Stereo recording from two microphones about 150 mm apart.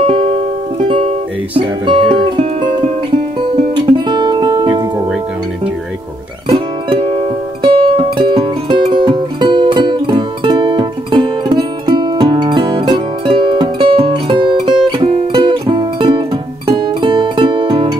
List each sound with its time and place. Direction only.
0.0 s music: 40° right (ahead or behind)
1.6 s speech: 35° right (ahead or behind)
3.3 s music: 30° right (ahead or behind)
6.5 s music: 40° right (ahead or behind)